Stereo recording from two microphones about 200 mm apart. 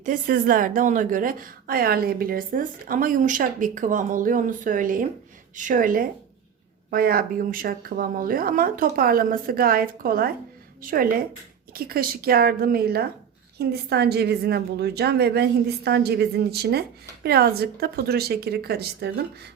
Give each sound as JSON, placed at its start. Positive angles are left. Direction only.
{"t": 0.0, "sound": "a woman's voice", "side_deg": -45}